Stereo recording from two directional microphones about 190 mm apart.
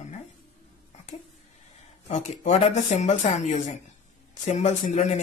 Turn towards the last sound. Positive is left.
turn(degrees=40)  # may be behind; listen again after turning